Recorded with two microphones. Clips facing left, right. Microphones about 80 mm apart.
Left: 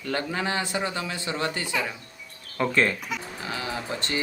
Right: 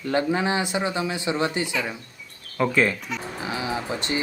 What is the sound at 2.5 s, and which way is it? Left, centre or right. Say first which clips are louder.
Speech: right 2 dB; centre.